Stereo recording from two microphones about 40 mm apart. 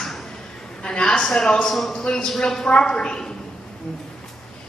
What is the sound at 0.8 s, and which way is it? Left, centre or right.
A woman's voice, left.